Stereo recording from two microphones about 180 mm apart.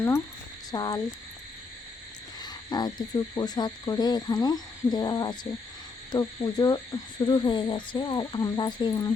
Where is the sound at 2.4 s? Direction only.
25° left (ahead or behind).